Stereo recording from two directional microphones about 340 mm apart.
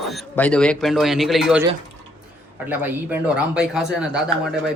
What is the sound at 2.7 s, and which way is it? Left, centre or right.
Speech, centre.